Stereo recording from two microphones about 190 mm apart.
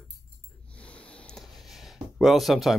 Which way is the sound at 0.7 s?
5° left (ahead or behind).